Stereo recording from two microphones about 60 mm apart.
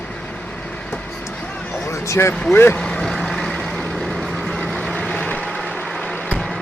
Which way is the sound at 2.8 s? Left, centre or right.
Centre.